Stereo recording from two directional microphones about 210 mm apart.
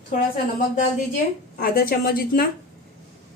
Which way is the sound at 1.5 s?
45° left (ahead or behind).